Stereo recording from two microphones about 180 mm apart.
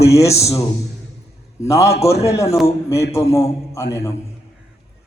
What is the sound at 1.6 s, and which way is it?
A man's voice, 15° left (ahead or behind).